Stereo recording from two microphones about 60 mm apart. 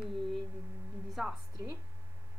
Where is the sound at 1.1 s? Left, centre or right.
Centre.